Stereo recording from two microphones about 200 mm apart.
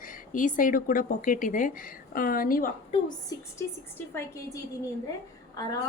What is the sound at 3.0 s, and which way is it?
Speech, 20° left (ahead or behind).